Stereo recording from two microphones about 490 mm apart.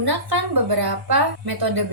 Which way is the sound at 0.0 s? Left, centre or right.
Right.